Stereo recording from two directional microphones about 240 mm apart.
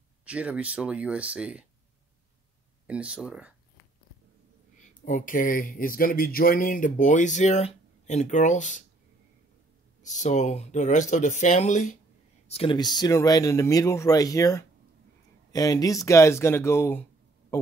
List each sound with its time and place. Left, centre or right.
0.2 s speech: centre
2.9 s speech: centre
5.0 s speech: left
10.0 s speech: left; by 17.0 s centre